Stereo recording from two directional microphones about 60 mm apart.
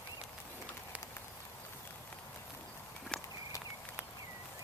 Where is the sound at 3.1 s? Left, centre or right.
Centre.